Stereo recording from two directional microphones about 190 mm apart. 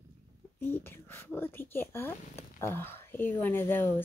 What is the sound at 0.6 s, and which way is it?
Speech, 10° left (ahead or behind).